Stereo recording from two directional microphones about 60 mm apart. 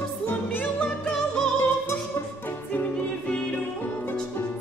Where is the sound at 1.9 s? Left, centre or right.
Left.